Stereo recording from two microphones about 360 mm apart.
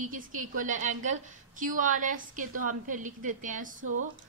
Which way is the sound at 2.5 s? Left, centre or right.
Right.